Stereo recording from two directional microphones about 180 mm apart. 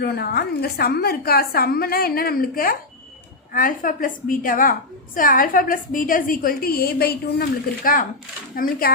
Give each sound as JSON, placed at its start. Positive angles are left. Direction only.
{"t": 0.0, "sound": "a woman's voice", "side_deg": 60}
{"t": 8.5, "sound": "a woman's voice", "side_deg": 50}